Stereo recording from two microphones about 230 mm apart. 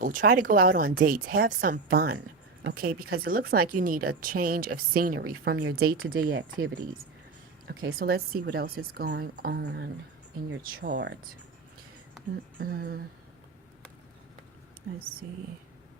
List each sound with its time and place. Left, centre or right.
0.0 s speech: right
7.7 s speech: right
12.5 s speech: right